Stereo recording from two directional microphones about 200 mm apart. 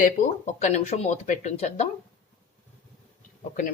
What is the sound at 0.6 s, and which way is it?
Speech, 35° left (ahead or behind).